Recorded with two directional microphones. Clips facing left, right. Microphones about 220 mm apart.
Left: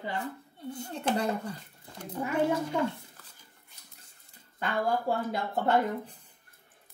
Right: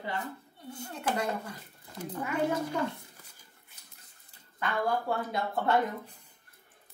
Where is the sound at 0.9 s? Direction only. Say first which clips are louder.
Left 2 dB; 30° left (ahead or behind).